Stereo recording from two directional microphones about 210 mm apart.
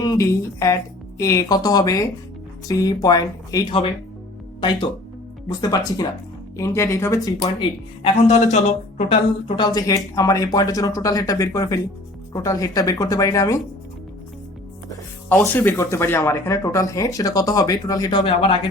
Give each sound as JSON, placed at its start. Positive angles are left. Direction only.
{"t": 0.0, "sound": "speech", "side_deg": 15}
{"t": 8.3, "sound": "speech", "side_deg": 35}
{"t": 9.6, "sound": "speech", "side_deg": 20}
{"t": 14.8, "sound": "speech", "side_deg": 10}